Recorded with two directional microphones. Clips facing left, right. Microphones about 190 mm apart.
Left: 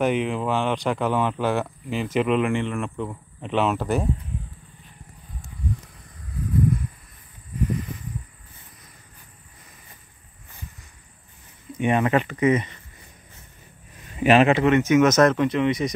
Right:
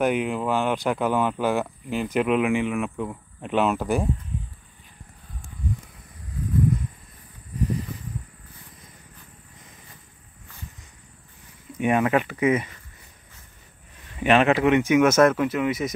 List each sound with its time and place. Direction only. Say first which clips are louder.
0.0 s speech: even; 5° right (ahead or behind)
11.8 s speech: even; 5° right (ahead or behind)
14.2 s speech: left 2 dB; 5° left (ahead or behind)
14.6 s speech: left 1 dB; 15° right (ahead or behind)